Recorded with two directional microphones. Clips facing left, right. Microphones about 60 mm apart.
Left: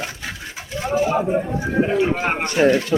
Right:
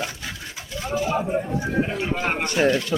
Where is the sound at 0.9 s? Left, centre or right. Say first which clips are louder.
Left 5 dB; left.